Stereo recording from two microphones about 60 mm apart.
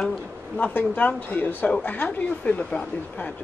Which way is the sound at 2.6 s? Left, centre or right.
Centre.